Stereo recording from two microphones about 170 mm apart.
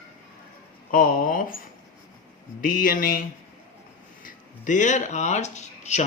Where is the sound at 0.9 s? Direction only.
55° left (ahead or behind).